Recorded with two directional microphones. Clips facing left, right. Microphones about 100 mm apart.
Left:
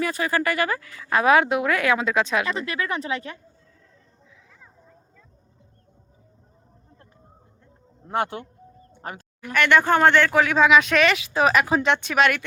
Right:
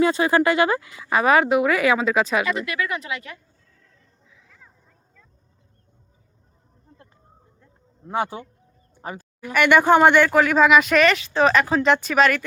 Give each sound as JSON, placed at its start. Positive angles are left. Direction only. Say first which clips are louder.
{"t": 0.0, "sound": "speech", "louder": "right 6 dB", "side_deg": -25}
{"t": 1.2, "sound": "speech", "louder": "right 1 dB", "side_deg": 0}
{"t": 2.5, "sound": "speech", "louder": "right 2 dB", "side_deg": 30}
{"t": 4.4, "sound": "a sound", "louder": "left 2 dB", "side_deg": 10}
{"t": 8.0, "sound": "speech", "louder": "even", "side_deg": -5}